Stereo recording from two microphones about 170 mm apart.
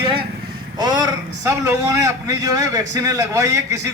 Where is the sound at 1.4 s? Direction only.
20° right (ahead or behind).